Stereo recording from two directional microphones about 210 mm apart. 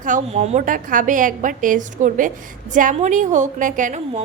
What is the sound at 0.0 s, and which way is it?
A woman's voice, 35° right (ahead or behind).